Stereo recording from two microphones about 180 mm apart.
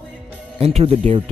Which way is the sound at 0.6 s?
35° right (ahead or behind).